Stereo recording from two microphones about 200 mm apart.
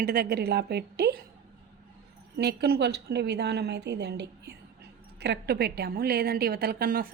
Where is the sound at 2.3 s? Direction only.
55° right (ahead or behind).